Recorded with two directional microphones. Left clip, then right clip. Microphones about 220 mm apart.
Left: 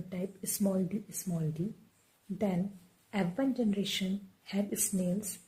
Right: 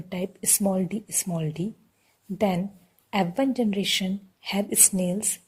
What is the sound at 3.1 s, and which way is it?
A woman's voice, 35° right (ahead or behind).